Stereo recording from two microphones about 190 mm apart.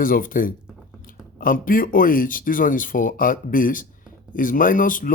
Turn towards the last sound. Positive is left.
turn(degrees=45)  # may be behind; listen again after turning